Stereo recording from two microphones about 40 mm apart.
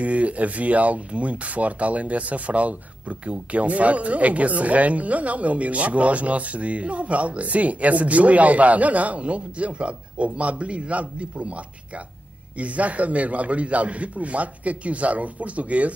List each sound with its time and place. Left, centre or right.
0.0 s speech: right